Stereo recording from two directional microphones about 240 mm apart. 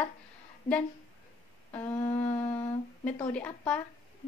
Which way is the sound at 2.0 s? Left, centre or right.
Left.